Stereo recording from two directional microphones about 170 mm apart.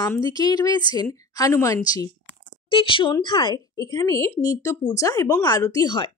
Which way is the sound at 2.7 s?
30° left (ahead or behind).